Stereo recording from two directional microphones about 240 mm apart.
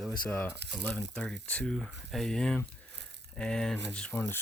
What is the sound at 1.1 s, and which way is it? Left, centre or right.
Speech, centre.